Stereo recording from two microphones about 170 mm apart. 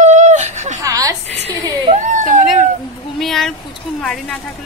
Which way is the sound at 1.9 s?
45° right (ahead or behind).